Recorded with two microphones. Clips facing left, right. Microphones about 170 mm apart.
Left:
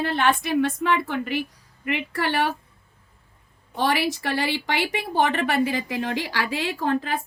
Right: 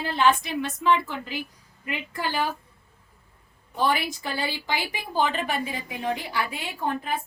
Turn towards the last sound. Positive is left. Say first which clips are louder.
# left 4 dB
turn(degrees=90)